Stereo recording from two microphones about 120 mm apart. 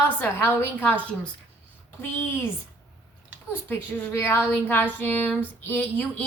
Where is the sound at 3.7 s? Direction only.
20° left (ahead or behind).